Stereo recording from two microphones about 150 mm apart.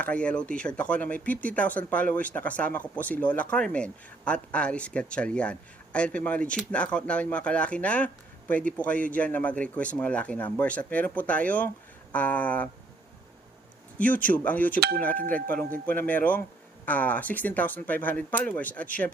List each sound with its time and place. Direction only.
0.0 s speech: 10° left (ahead or behind)
14.0 s speech: 10° left (ahead or behind)
14.8 s a sound: 90° right
15.3 s speech: 10° left (ahead or behind)